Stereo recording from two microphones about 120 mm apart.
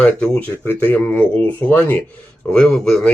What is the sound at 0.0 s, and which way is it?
Speech, 10° left (ahead or behind).